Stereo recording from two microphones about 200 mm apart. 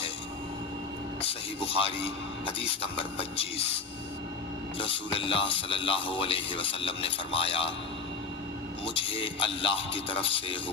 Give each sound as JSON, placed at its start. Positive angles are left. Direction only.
{"t": 1.2, "sound": "speech", "side_deg": 30}
{"t": 4.8, "sound": "speech", "side_deg": 25}
{"t": 8.8, "sound": "speech", "side_deg": 25}